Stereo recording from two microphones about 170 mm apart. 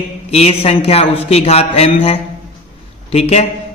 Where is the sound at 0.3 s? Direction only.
35° left (ahead or behind).